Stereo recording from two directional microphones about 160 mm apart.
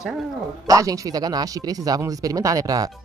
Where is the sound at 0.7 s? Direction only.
20° right (ahead or behind).